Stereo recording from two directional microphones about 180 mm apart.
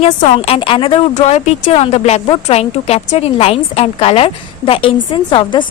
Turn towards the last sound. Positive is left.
turn(degrees=25)  # may be behind; listen again after turning